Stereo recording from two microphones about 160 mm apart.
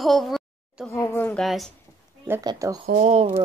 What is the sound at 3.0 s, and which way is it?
Speech, 45° right (ahead or behind).